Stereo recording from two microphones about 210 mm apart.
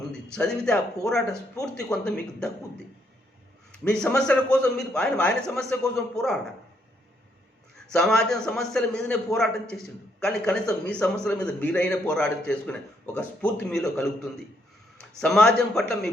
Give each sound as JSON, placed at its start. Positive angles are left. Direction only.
{"t": 0.1, "sound": "a man's voice", "side_deg": 5}
{"t": 3.7, "sound": "a man's voice", "side_deg": 5}
{"t": 7.9, "sound": "a man's voice", "side_deg": 5}
{"t": 15.2, "sound": "a man's voice", "side_deg": 5}